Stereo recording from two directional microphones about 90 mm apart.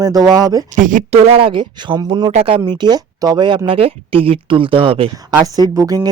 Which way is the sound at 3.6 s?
90° right.